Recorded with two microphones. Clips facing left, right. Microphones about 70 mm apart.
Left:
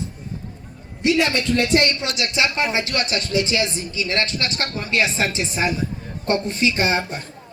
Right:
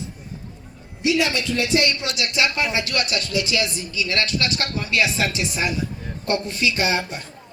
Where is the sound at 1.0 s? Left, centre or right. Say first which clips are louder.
Left 2 dB; left.